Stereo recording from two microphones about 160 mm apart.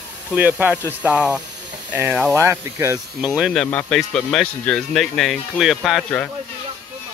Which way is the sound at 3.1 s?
5° right (ahead or behind).